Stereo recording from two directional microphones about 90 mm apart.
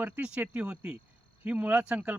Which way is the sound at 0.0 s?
10° right (ahead or behind).